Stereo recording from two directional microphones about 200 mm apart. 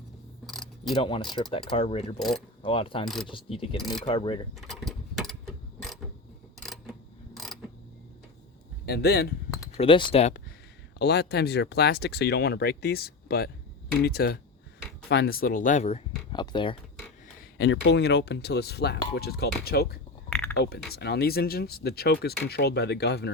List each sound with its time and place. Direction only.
0.4 s mechanisms: centre (ahead or behind)
0.9 s speech: 25° left (ahead or behind)
4.5 s mechanisms: centre (ahead or behind)
6.6 s a sound: centre (ahead or behind)
7.3 s mechanisms: centre (ahead or behind)
8.9 s speech: 55° left (ahead or behind)
9.7 s speech: 25° left (ahead or behind)
10.9 s speech: 55° left (ahead or behind); by 16.7 s 25° left (ahead or behind)
17.6 s speech: 60° left (ahead or behind)